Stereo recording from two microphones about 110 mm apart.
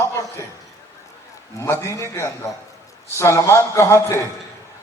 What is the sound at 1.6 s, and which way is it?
A man's voice, 25° left (ahead or behind).